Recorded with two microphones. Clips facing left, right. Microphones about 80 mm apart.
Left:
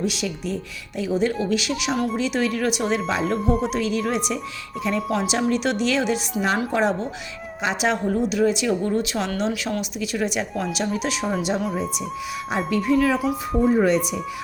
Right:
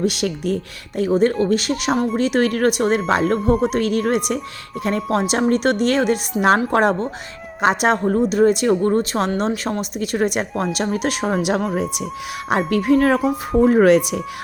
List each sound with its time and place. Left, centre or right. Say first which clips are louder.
0.0 s speech: right 5 dB; right
3.3 s speech: right 4 dB; centre
3.6 s speech: right 5 dB; right
13.6 s speech: right 6 dB; right